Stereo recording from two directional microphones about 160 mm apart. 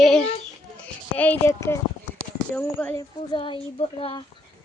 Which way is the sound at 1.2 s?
15° left (ahead or behind).